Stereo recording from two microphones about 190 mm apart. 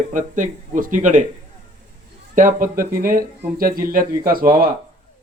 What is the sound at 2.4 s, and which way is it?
A man's voice, 45° right (ahead or behind).